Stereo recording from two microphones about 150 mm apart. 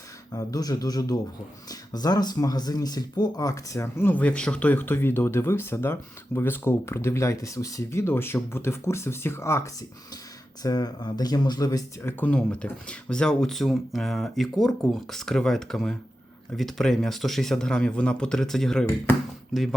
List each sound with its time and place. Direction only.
0.3 s speech: 25° left (ahead or behind)
12.2 s speech: 10° left (ahead or behind)